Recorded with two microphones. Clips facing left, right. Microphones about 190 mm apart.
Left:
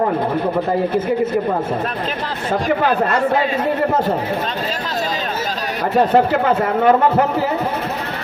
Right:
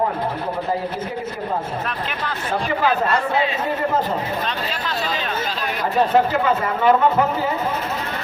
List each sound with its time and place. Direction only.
6.0 s speech: 60° left (ahead or behind)